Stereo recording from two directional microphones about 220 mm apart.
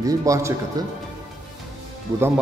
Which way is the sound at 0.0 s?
15° right (ahead or behind).